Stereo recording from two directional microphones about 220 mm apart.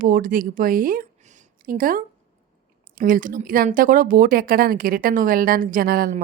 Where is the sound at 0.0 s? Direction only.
40° right (ahead or behind).